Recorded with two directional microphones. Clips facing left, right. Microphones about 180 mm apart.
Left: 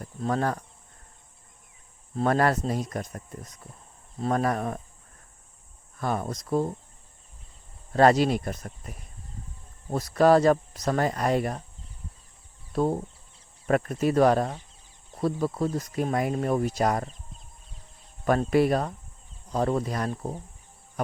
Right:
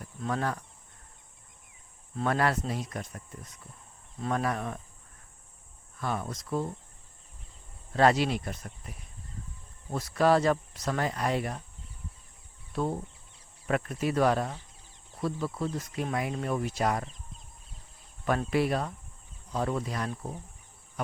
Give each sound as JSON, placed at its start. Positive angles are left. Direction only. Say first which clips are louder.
{"t": 0.0, "sound": "cricket", "louder": "left 5 dB", "side_deg": 40}
{"t": 2.1, "sound": "speech", "louder": "left 4 dB", "side_deg": 40}
{"t": 6.0, "sound": "speech", "louder": "left 4 dB", "side_deg": 45}
{"t": 7.9, "sound": "speech", "louder": "left 4 dB", "side_deg": 45}
{"t": 12.7, "sound": "speech", "louder": "left 6 dB", "side_deg": 40}
{"t": 18.3, "sound": "speech", "louder": "left 5 dB", "side_deg": 45}